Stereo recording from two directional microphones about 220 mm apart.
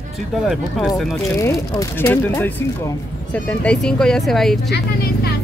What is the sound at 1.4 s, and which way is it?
A woman's voice, 15° left (ahead or behind).